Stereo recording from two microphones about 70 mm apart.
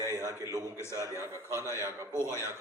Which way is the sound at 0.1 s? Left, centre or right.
Left.